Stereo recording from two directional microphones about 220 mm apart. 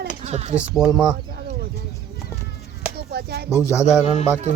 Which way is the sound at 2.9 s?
45° right (ahead or behind).